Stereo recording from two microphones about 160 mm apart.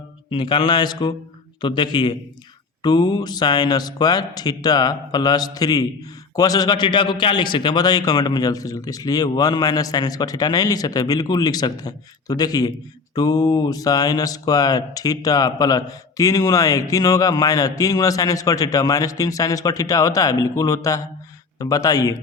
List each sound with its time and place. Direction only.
0.3 s speech: 30° left (ahead or behind)